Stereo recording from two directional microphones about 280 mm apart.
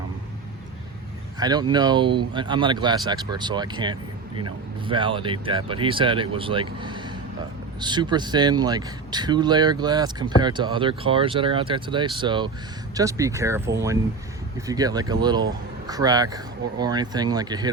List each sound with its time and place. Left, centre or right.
1.4 s speech: centre